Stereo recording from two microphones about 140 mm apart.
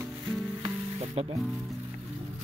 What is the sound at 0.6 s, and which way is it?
Speech, 45° right (ahead or behind).